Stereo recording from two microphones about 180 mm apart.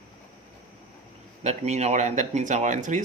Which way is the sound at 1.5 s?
40° right (ahead or behind).